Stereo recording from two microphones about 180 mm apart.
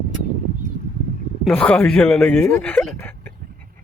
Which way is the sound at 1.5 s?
5° left (ahead or behind).